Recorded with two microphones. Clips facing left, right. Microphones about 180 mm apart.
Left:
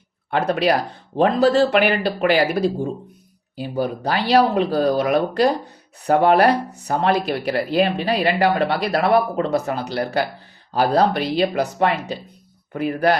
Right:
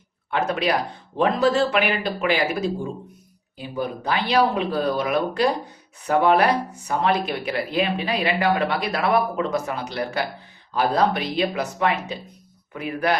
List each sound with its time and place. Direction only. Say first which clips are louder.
0.3 s speech: left 4 dB; 35° left (ahead or behind)